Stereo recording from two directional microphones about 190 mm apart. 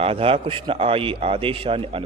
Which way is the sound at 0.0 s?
30° right (ahead or behind).